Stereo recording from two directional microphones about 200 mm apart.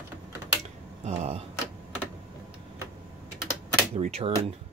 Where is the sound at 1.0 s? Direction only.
35° right (ahead or behind).